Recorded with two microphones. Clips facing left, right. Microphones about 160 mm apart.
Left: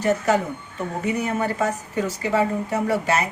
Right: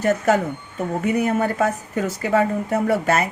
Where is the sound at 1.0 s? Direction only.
55° right (ahead or behind).